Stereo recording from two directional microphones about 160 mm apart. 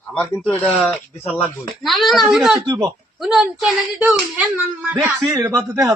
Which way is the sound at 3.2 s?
Centre (ahead or behind).